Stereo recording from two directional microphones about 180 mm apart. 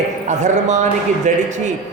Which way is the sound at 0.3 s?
40° right (ahead or behind).